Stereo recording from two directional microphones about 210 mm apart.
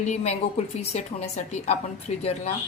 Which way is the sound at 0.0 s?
35° left (ahead or behind).